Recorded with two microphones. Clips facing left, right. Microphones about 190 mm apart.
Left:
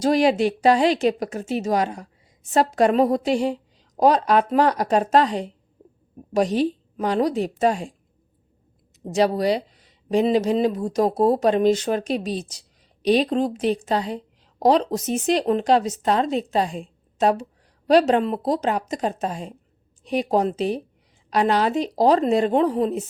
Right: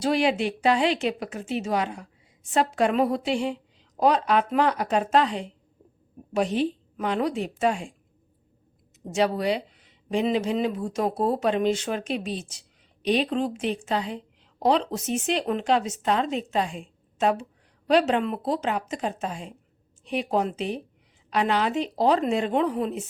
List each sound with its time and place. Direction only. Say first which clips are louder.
0.0 s speech: left 5 dB; 40° left (ahead or behind)
9.1 s speech: left 4 dB; 40° left (ahead or behind)